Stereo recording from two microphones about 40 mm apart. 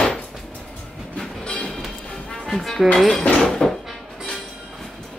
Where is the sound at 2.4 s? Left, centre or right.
Centre.